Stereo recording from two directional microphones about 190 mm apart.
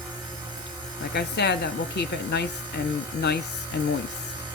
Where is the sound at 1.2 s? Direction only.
60° left (ahead or behind).